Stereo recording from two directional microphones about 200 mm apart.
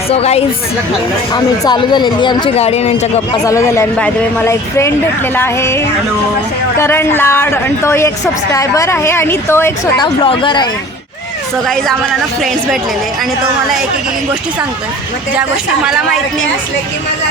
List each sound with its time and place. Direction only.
0.1 s a woman's voice: 30° left (ahead or behind)
3.4 s a woman's voice: 15° left (ahead or behind)